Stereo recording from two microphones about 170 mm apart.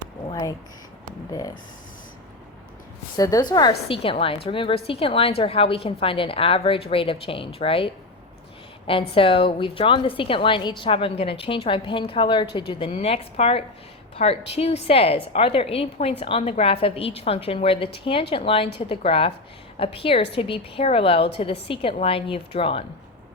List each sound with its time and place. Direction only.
0.3 s a woman's voice: 20° left (ahead or behind)
3.2 s a woman's voice: 20° left (ahead or behind)
8.9 s a woman's voice: 30° left (ahead or behind)
12.9 s a woman's voice: 40° left (ahead or behind)